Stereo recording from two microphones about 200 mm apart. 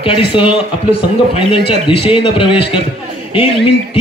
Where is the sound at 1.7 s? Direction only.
25° left (ahead or behind).